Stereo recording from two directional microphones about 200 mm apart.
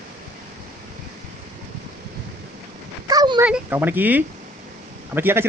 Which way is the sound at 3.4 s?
10° right (ahead or behind).